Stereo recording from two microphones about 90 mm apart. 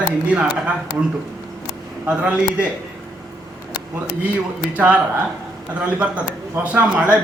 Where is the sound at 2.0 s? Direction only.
15° right (ahead or behind).